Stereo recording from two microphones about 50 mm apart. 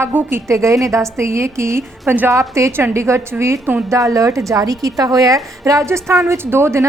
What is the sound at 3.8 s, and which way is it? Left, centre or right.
Speech, right.